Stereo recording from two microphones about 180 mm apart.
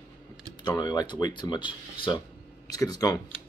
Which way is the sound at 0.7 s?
20° left (ahead or behind).